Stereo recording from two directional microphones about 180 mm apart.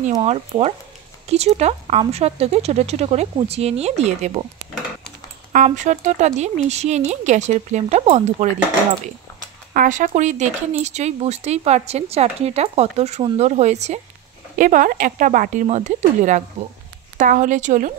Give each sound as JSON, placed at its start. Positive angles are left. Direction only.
{"t": 0.2, "sound": "speech", "side_deg": -35}
{"t": 5.5, "sound": "speech", "side_deg": -45}
{"t": 9.8, "sound": "speech", "side_deg": -45}